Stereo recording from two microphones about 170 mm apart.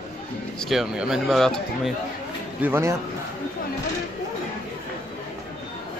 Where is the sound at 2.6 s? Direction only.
15° right (ahead or behind).